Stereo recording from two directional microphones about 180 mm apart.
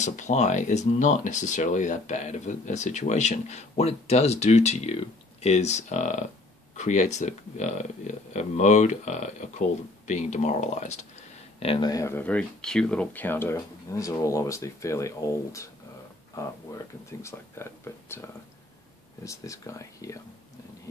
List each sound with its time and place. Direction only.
0.0 s speech: 40° left (ahead or behind); by 20.2 s 15° left (ahead or behind)